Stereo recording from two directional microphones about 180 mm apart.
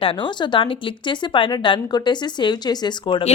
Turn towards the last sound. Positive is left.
turn(degrees=25)  # may be behind; listen again after turning